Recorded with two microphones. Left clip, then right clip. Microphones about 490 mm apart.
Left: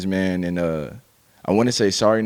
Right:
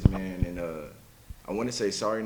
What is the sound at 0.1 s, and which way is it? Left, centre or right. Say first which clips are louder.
Speech: left 12 dB; left.